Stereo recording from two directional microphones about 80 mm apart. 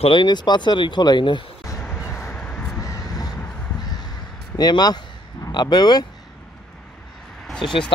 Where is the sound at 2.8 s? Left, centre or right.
Left.